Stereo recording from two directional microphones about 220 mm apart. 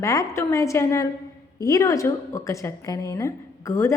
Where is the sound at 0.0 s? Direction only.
15° left (ahead or behind).